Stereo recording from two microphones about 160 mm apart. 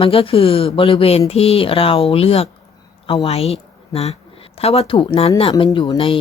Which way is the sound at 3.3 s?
40° left (ahead or behind).